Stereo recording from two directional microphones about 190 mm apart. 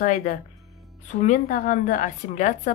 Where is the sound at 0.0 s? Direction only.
45° left (ahead or behind).